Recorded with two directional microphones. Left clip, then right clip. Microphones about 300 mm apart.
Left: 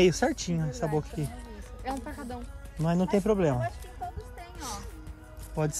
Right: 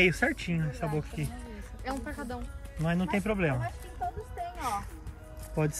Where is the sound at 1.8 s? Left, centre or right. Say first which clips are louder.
Left 1 dB; left.